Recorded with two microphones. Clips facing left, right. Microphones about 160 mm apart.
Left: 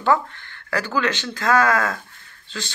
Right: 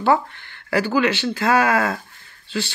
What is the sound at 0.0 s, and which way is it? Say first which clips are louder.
Speech: right 1 dB; 15° right (ahead or behind).